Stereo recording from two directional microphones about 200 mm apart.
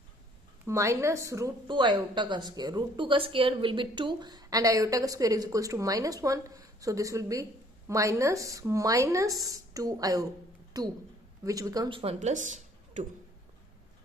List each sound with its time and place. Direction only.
0.7 s a woman's voice: 15° right (ahead or behind); by 13.1 s 40° right (ahead or behind)